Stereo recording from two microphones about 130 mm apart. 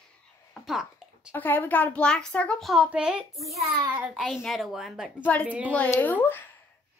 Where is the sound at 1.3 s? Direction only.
15° left (ahead or behind).